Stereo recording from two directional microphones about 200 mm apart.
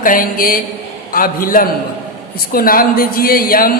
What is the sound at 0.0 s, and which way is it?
A woman's voice, 45° left (ahead or behind).